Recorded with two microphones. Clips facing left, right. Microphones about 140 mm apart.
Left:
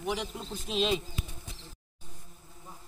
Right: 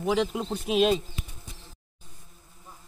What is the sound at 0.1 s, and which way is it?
Speech, 90° right.